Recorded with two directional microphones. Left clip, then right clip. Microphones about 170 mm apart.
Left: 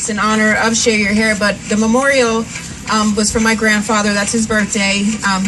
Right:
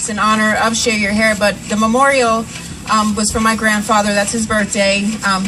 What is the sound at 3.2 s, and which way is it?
A woman's voice, 25° left (ahead or behind).